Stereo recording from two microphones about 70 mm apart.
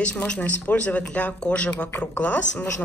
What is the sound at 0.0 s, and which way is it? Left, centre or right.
Speech, centre.